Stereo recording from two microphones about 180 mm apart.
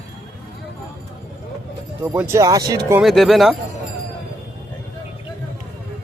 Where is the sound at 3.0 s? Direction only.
Centre (ahead or behind).